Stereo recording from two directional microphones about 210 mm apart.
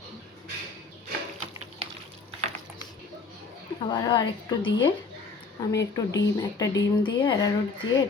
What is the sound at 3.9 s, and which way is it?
Speech, 20° left (ahead or behind).